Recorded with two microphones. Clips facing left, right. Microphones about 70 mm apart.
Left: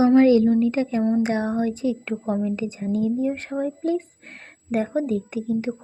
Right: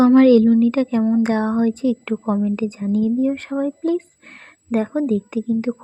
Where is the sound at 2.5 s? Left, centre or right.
Right.